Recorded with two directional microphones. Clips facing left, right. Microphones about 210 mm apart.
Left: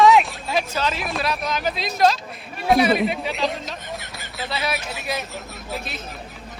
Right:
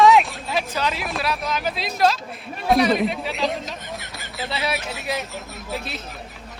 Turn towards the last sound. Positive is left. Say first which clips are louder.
# right 1 dB
turn(degrees=0)  # may be behind; listen again after turning